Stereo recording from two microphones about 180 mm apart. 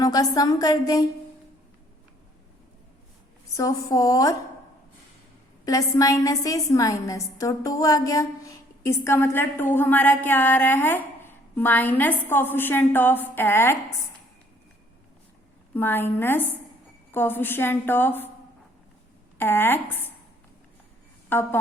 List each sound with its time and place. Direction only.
0.0 s a woman's voice: 20° left (ahead or behind)
3.6 s a woman's voice: 20° left (ahead or behind)
5.6 s a woman's voice: 20° left (ahead or behind)
15.7 s a woman's voice: 10° left (ahead or behind)
19.4 s a woman's voice: 10° left (ahead or behind)
21.2 s speech: 10° left (ahead or behind)